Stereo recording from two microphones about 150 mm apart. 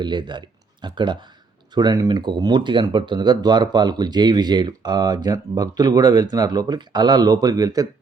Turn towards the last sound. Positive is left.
turn(degrees=-25)  # may be behind; listen again after turning